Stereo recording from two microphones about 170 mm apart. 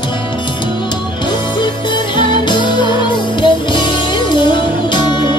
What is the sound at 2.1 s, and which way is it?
Music, 25° left (ahead or behind).